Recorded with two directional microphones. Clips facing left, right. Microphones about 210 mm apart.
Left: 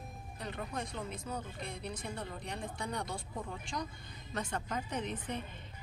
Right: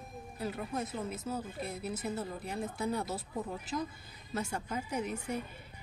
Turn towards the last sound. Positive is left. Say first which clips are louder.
# right 3 dB
turn(degrees=-10)  # may be behind; listen again after turning